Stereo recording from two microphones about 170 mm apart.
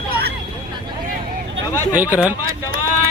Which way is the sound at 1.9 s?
10° right (ahead or behind).